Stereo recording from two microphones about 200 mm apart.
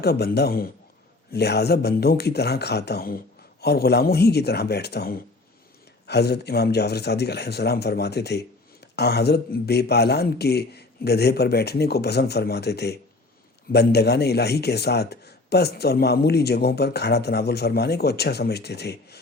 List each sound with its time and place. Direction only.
0.0 s a man's voice: 50° left (ahead or behind)